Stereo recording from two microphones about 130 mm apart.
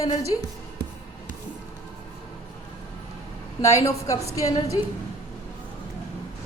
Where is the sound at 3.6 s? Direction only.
25° left (ahead or behind).